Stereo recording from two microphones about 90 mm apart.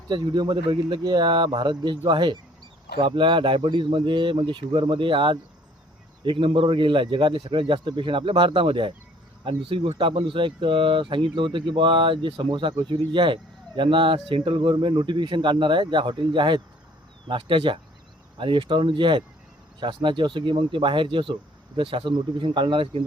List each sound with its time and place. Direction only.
0.1 s speech: 55° right (ahead or behind); by 8.9 s 70° right (ahead or behind)
9.4 s speech: 85° right